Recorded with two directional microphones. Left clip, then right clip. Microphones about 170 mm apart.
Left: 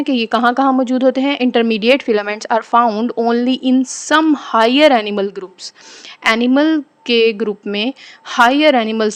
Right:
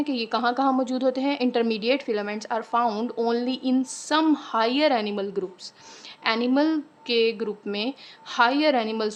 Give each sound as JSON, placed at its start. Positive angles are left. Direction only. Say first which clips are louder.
{"t": 0.0, "sound": "a woman's voice", "louder": "left 10 dB", "side_deg": 40}
{"t": 2.8, "sound": "a woman's voice", "louder": "left 9 dB", "side_deg": 30}